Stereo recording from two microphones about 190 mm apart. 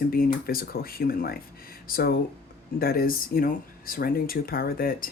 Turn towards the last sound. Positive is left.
turn(degrees=50)  # may be behind; listen again after turning